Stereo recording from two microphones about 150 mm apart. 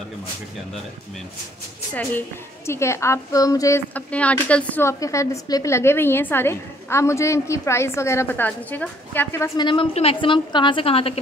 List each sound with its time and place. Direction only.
2.0 s a woman's voice: 15° left (ahead or behind)
9.6 s a woman's voice: 30° left (ahead or behind)